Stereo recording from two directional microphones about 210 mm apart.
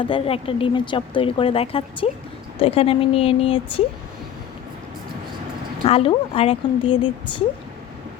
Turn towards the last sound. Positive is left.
turn(degrees=25)  # may be behind; listen again after turning